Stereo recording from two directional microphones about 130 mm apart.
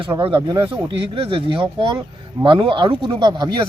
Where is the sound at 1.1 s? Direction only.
45° right (ahead or behind).